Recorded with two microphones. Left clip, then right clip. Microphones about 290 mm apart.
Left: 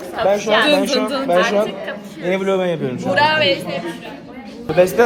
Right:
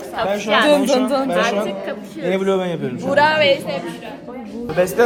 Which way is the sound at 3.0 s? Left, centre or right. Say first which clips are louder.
Right 1 dB; right.